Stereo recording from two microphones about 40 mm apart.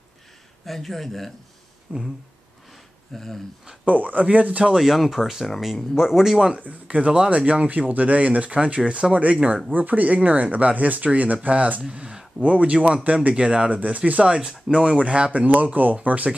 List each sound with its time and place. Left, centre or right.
0.7 s speech: centre
1.9 s speech: right
3.1 s speech: centre
3.8 s speech: right
4.7 s speech: centre
6.5 s speech: right
13.3 s speech: right
13.7 s speech: right
14.2 s speech: right
15.4 s speech: right